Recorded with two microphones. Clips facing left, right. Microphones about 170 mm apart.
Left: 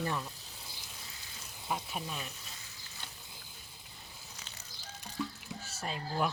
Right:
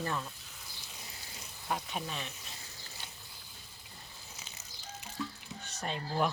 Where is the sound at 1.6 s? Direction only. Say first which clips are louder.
Right 1 dB; 5° left (ahead or behind).